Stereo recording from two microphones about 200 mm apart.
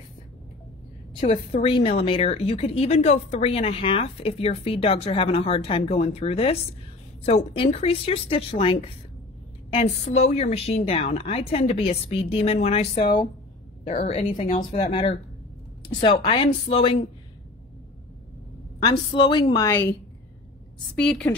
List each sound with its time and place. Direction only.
1.2 s a woman's voice: 30° left (ahead or behind)
18.9 s a woman's voice: 20° left (ahead or behind); by 21.4 s 5° left (ahead or behind)